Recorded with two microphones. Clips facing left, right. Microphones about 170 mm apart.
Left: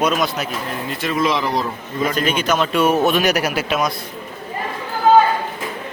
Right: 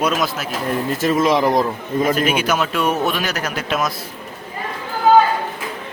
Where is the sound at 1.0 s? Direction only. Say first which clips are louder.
Right 3 dB; 40° right (ahead or behind).